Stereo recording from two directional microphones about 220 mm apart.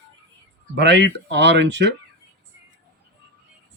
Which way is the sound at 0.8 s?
50° right (ahead or behind).